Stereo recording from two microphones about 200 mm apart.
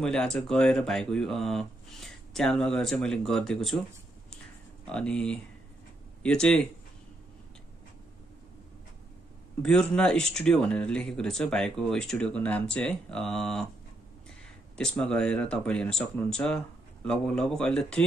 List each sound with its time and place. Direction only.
0.0 s speech: 5° left (ahead or behind)
4.8 s speech: 5° left (ahead or behind)
9.6 s speech: 5° left (ahead or behind)
14.8 s speech: 5° left (ahead or behind)